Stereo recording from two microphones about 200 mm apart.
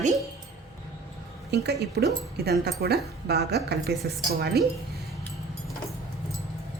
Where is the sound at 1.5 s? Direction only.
55° right (ahead or behind).